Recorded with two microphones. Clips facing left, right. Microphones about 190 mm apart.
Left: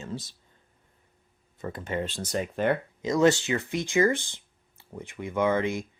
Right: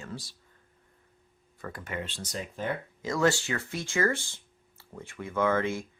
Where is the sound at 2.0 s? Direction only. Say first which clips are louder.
Left 7 dB; 50° left (ahead or behind).